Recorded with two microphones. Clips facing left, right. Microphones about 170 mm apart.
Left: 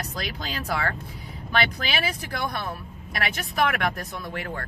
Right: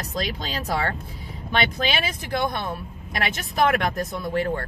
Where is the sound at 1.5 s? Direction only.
20° right (ahead or behind).